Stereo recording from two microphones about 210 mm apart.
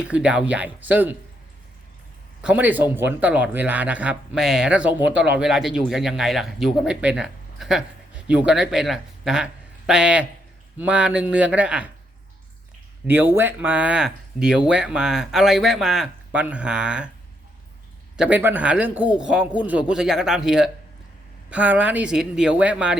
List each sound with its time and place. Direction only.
0.0 s speech: 5° right (ahead or behind)
2.4 s speech: 5° right (ahead or behind)
13.1 s speech: 10° right (ahead or behind)
18.2 s speech: 10° right (ahead or behind)